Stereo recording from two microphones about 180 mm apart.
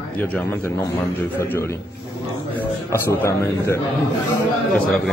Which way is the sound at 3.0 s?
15° left (ahead or behind).